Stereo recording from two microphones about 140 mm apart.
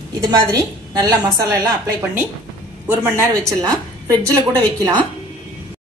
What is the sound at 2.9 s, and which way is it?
Speech, 15° right (ahead or behind).